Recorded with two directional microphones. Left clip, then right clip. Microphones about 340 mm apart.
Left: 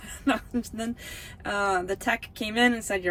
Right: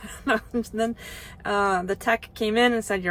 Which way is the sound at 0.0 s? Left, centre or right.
Centre.